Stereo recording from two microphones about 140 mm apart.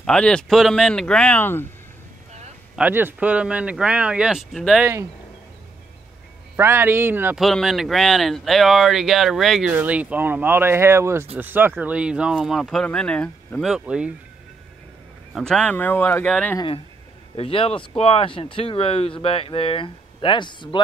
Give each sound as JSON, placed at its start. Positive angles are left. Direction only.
{"t": 0.0, "sound": "speech", "side_deg": 5}
{"t": 2.7, "sound": "speech", "side_deg": -15}
{"t": 6.5, "sound": "speech", "side_deg": -15}
{"t": 7.3, "sound": "speech", "side_deg": 0}
{"t": 15.3, "sound": "speech", "side_deg": 5}
{"t": 16.5, "sound": "speech", "side_deg": 35}